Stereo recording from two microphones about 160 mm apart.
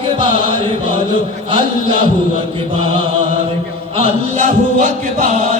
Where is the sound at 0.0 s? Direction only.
30° right (ahead or behind).